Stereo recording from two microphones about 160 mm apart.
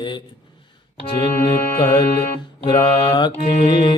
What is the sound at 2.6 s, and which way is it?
Mantra, 25° left (ahead or behind).